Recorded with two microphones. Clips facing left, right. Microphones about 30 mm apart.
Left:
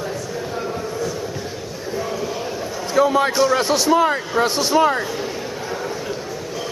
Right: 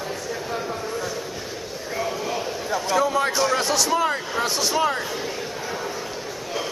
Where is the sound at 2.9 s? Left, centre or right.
Centre.